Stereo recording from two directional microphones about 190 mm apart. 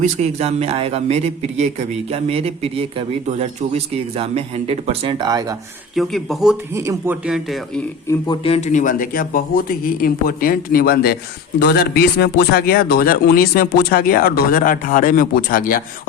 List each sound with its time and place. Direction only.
0.0 s a man's voice: 35° right (ahead or behind)
5.9 s speech: centre (ahead or behind)
6.7 s speech: 15° right (ahead or behind)
8.3 s speech: 30° left (ahead or behind)